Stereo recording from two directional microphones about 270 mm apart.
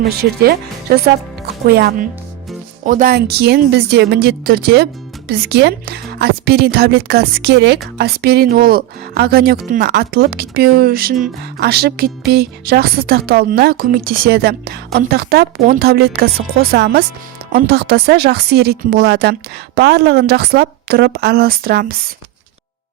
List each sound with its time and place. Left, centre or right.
0.4 s speech: right